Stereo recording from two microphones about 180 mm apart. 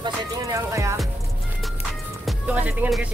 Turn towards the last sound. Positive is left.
turn(degrees=-10)  # may be behind; listen again after turning